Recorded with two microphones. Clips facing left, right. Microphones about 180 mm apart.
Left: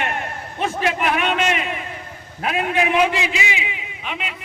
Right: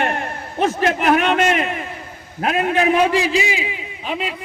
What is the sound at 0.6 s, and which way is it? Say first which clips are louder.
A man's voice: right 4 dB; 40° right (ahead or behind).